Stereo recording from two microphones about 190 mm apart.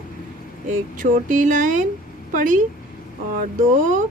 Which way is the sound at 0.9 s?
40° right (ahead or behind).